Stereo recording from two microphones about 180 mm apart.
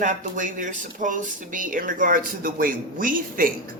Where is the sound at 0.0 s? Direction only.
45° right (ahead or behind).